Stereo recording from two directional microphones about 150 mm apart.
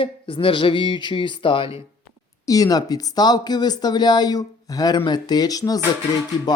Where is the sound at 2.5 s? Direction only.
25° left (ahead or behind).